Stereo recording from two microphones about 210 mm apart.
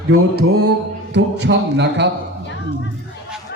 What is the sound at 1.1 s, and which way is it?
Speech, 55° right (ahead or behind).